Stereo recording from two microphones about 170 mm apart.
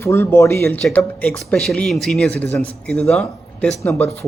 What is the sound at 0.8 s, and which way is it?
Speech, 5° left (ahead or behind).